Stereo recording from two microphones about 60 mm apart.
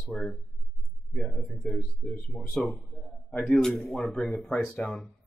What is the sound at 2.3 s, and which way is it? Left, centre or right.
Speech, centre.